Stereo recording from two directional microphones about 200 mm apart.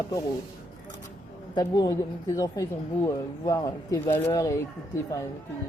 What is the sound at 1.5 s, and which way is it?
Speech, 20° left (ahead or behind).